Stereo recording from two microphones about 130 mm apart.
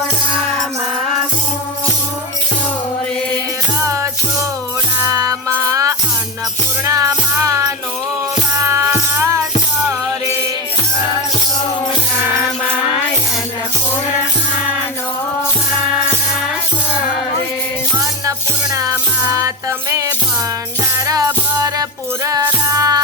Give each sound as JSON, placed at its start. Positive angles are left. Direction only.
{"t": 3.8, "sound": "music", "side_deg": -25}
{"t": 18.3, "sound": "music", "side_deg": -25}
{"t": 20.9, "sound": "music", "side_deg": -25}